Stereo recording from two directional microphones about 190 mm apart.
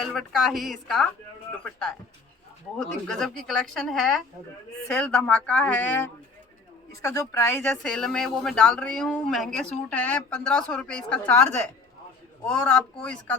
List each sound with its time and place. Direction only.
0.0 s speech: centre (ahead or behind)
2.7 s speech: 5° left (ahead or behind)